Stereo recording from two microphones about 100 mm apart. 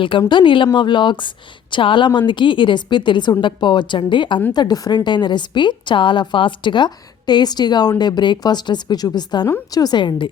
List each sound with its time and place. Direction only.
0.2 s a woman's voice: 50° left (ahead or behind)
4.5 s a woman's voice: 45° left (ahead or behind)